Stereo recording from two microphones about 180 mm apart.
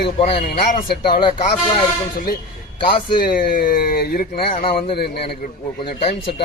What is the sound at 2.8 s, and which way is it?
Speech, 60° left (ahead or behind).